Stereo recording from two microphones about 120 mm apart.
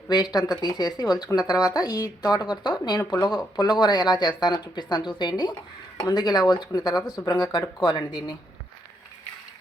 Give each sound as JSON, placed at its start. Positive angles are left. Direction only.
{"t": 0.1, "sound": "speech", "side_deg": 35}